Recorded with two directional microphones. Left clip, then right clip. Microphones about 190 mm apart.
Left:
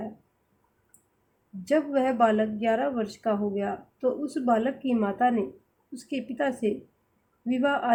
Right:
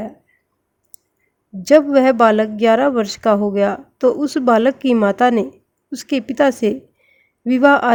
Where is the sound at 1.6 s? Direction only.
55° right (ahead or behind).